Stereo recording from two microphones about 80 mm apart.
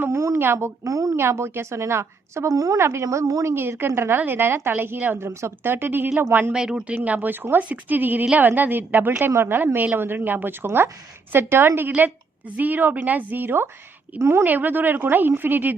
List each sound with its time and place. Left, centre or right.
0.1 s a woman's voice: right
3.5 s a woman's voice: right
6.5 s a woman's voice: centre